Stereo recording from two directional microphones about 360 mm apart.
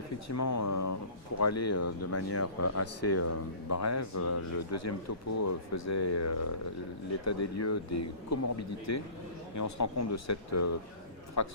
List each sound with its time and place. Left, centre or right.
0.3 s speech: left